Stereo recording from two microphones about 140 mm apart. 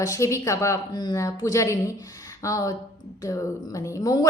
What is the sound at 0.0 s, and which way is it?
Speech, 25° left (ahead or behind).